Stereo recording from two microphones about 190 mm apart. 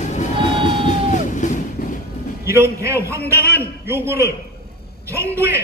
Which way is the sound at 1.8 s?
50° left (ahead or behind).